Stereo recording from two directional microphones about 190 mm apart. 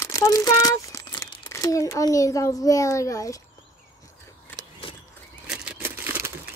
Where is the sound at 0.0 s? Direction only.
20° left (ahead or behind).